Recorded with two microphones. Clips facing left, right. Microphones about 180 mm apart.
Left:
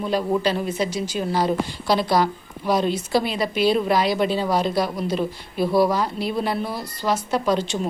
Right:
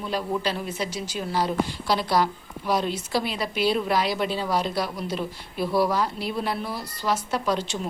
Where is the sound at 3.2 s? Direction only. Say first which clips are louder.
Left 4 dB; 5° right (ahead or behind).